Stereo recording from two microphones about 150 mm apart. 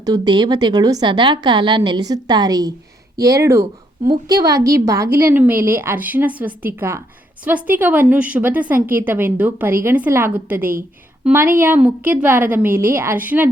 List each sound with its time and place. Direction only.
0.0 s a woman's voice: 25° right (ahead or behind); by 13.5 s 10° right (ahead or behind)